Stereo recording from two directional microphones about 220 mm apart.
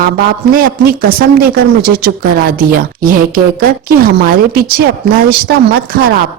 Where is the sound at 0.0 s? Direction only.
40° right (ahead or behind).